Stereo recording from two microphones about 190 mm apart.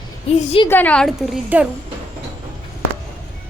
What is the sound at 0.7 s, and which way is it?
Speech, 10° left (ahead or behind).